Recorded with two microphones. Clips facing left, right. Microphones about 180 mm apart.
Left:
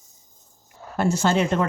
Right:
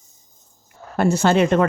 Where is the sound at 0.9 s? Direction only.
60° right (ahead or behind).